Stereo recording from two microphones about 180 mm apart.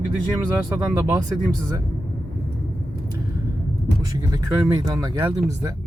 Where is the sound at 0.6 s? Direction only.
10° right (ahead or behind).